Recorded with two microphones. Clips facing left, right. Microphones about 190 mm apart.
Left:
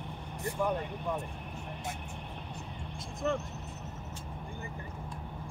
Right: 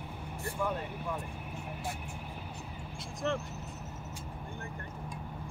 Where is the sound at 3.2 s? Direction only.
Centre (ahead or behind).